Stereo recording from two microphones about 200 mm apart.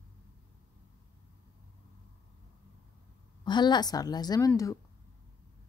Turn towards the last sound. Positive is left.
turn(degrees=15)  # may be behind; listen again after turning